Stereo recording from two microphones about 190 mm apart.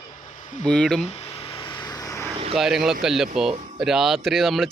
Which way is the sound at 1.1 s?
30° left (ahead or behind).